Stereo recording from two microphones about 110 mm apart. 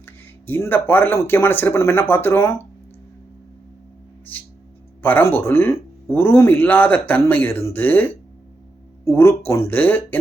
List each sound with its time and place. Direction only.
0.0 s speech: 20° left (ahead or behind)
4.3 s music: 15° left (ahead or behind)
5.0 s speech: 15° left (ahead or behind)